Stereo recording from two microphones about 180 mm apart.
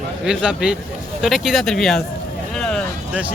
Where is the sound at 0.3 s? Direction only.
5° right (ahead or behind).